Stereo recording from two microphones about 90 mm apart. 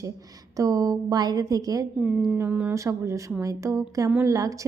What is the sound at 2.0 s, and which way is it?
Speech, 15° right (ahead or behind).